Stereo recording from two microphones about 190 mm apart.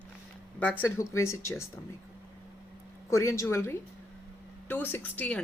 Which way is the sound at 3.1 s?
15° left (ahead or behind).